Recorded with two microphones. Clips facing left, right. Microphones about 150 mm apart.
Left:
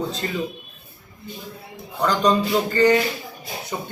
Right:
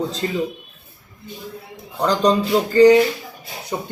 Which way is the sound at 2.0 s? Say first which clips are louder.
Right 2 dB; 30° right (ahead or behind).